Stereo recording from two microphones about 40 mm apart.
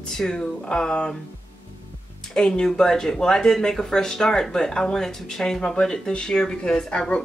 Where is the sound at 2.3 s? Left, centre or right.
Centre.